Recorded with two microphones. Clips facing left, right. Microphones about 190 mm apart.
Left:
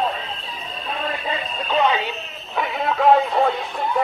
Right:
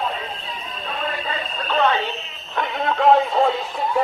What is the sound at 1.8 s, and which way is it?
Radio, 10° left (ahead or behind).